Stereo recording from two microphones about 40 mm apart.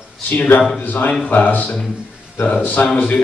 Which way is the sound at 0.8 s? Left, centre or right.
Left.